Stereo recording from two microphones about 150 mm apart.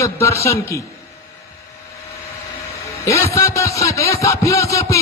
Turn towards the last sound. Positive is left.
turn(degrees=20)  # may be behind; listen again after turning